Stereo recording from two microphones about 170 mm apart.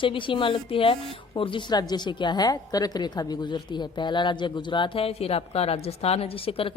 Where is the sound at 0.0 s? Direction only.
30° left (ahead or behind).